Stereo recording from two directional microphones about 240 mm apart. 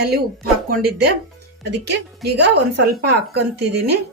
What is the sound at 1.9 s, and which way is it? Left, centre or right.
Speech, right.